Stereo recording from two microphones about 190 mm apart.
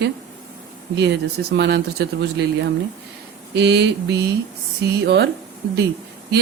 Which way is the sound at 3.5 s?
65° right (ahead or behind).